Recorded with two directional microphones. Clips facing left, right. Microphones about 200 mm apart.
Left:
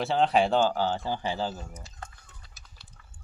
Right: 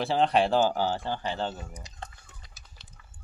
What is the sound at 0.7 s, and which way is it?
Speech, 15° right (ahead or behind).